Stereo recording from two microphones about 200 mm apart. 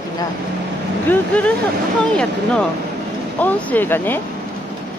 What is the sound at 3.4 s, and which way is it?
Speech, 5° left (ahead or behind).